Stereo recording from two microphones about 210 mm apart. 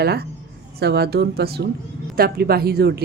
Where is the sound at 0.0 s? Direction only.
50° right (ahead or behind).